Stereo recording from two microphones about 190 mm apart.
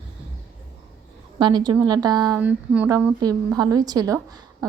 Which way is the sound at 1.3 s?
25° right (ahead or behind).